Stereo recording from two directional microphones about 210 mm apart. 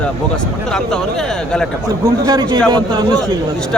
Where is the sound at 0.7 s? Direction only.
5° left (ahead or behind).